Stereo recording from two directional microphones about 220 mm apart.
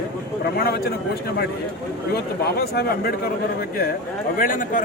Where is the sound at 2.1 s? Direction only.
45° left (ahead or behind).